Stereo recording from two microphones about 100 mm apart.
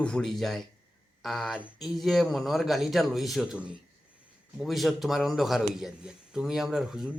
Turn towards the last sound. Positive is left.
turn(degrees=-5)  # may be behind; listen again after turning